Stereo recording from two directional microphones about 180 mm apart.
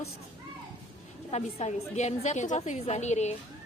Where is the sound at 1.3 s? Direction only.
40° left (ahead or behind).